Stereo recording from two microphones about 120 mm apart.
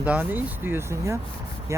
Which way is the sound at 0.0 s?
15° right (ahead or behind).